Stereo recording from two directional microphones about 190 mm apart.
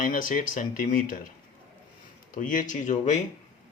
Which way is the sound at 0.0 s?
45° left (ahead or behind).